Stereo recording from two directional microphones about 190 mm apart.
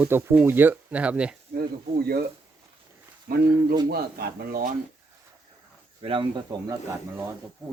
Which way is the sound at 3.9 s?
55° right (ahead or behind).